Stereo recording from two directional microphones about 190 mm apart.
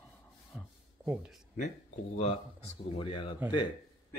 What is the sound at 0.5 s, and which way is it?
Speech, 5° right (ahead or behind).